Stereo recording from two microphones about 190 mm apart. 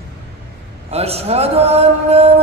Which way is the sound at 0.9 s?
30° right (ahead or behind).